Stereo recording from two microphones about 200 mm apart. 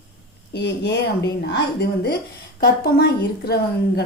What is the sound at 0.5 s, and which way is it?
A woman's voice, 60° left (ahead or behind).